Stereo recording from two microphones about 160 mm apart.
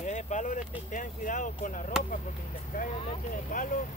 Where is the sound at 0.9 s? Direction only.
55° left (ahead or behind).